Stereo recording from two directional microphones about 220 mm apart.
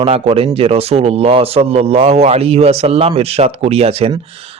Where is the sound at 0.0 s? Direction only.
25° right (ahead or behind).